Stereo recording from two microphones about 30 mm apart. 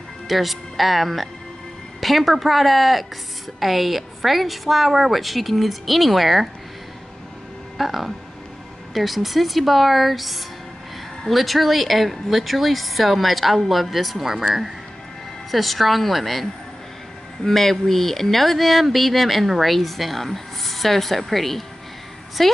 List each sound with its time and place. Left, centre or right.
0.3 s speech: centre
7.7 s speech: centre
15.5 s a woman's voice: centre